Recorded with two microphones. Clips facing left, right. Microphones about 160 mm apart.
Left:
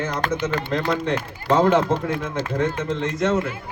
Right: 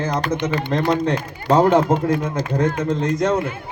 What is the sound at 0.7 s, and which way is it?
A man's voice, 40° right (ahead or behind).